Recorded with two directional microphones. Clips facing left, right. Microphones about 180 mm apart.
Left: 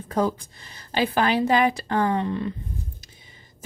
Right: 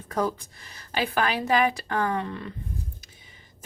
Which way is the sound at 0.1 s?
25° left (ahead or behind).